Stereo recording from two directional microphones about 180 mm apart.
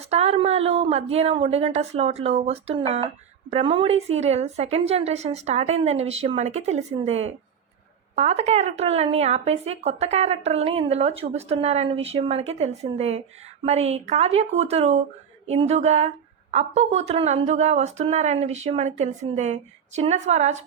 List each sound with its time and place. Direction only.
0.1 s speech: 35° right (ahead or behind)